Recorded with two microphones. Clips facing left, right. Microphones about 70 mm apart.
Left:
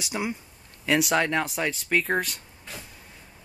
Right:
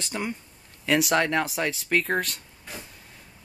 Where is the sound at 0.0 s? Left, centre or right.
Centre.